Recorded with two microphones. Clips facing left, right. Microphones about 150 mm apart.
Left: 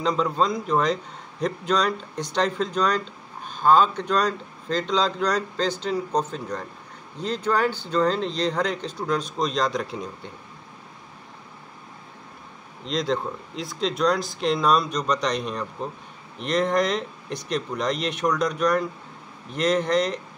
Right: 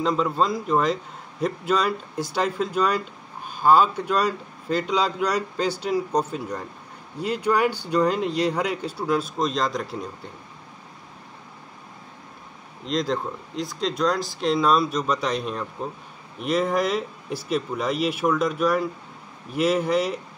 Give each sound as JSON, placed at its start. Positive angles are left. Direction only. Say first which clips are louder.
{"t": 0.0, "sound": "speech", "louder": "even", "side_deg": -5}
{"t": 12.8, "sound": "speech", "louder": "even", "side_deg": 0}